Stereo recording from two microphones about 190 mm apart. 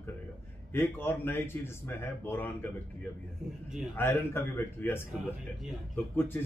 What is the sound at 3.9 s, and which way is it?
Speech, 10° left (ahead or behind).